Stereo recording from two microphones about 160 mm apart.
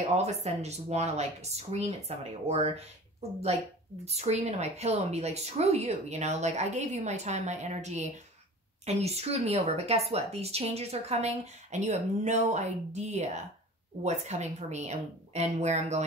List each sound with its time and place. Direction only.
0.1 s a woman's voice: 45° right (ahead or behind)